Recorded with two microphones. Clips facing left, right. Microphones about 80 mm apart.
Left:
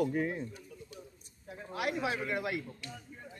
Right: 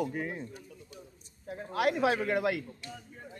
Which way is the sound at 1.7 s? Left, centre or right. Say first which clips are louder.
Right 6 dB; right.